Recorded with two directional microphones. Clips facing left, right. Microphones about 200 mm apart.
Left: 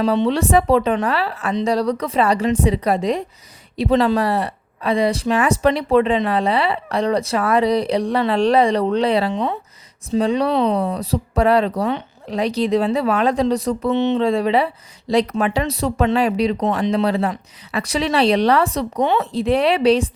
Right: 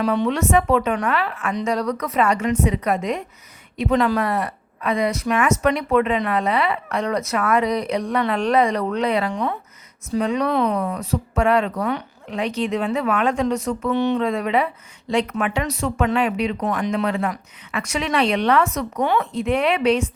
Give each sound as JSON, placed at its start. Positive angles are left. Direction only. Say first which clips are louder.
{"t": 0.0, "sound": "speech", "louder": "left 3 dB", "side_deg": 25}